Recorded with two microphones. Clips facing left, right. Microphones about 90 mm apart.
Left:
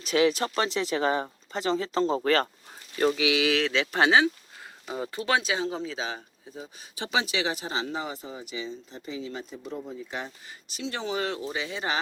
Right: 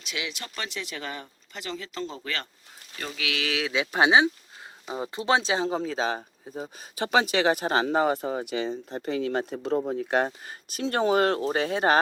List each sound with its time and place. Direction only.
0.0 s speech: 40° left (ahead or behind)
3.2 s speech: 20° left (ahead or behind)
3.4 s speech: centre (ahead or behind)
3.7 s speech: 15° right (ahead or behind); by 11.9 s 50° right (ahead or behind)